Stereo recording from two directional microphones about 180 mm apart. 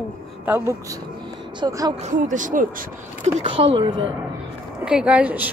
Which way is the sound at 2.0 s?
45° right (ahead or behind).